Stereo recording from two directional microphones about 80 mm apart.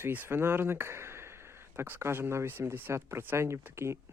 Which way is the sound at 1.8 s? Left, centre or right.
Right.